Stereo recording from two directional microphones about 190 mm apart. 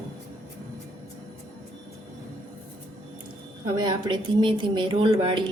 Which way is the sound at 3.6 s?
25° right (ahead or behind).